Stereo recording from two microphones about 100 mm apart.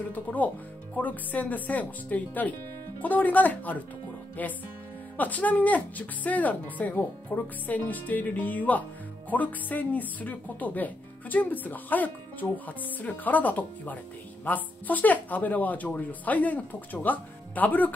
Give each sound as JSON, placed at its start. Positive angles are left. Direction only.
{"t": 0.1, "sound": "speech", "side_deg": 15}